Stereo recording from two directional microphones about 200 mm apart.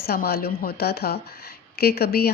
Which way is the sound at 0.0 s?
50° left (ahead or behind).